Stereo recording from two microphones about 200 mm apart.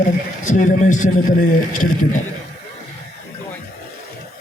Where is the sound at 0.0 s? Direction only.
40° left (ahead or behind).